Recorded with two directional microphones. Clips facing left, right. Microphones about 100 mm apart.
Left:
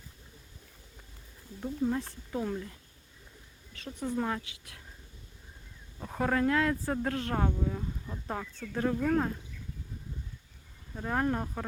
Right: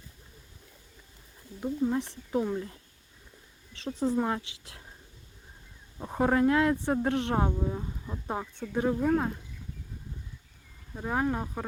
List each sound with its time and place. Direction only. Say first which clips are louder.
1.6 s speech: right 3 dB; 15° right (ahead or behind)
3.7 s a sound: right 7 dB; 30° right (ahead or behind)
4.2 s a woman's voice: right 3 dB; 25° right (ahead or behind)
6.0 s a woman's voice: right 4 dB; 20° right (ahead or behind)
10.9 s speech: right 1 dB; 10° right (ahead or behind)